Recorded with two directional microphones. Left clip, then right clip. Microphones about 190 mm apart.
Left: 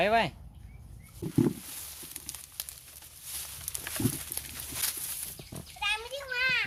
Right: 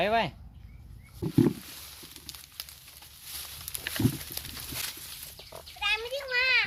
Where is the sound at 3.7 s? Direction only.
20° right (ahead or behind).